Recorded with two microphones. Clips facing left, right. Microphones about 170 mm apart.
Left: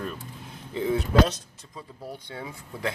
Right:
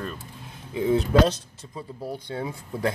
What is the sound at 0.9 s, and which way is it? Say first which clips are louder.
Speech: right 3 dB; 30° right (ahead or behind).